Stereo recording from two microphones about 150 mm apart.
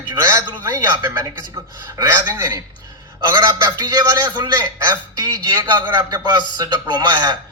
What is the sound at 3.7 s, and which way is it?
A man's voice, 30° right (ahead or behind).